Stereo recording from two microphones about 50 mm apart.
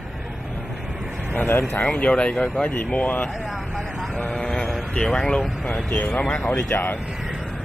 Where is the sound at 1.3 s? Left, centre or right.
Left.